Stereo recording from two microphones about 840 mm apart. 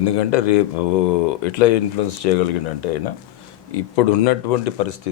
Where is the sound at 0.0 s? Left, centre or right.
Left.